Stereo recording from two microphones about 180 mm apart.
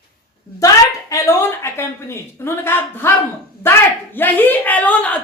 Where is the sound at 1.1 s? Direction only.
15° left (ahead or behind).